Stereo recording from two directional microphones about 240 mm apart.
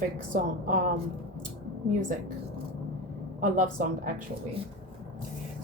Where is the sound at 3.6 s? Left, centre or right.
Right.